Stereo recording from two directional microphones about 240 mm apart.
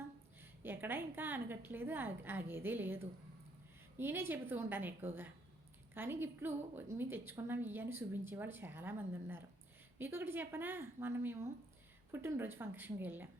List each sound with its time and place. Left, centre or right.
0.6 s a woman's voice: centre